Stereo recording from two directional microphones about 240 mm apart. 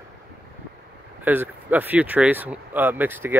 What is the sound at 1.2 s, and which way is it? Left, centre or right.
Speech, centre.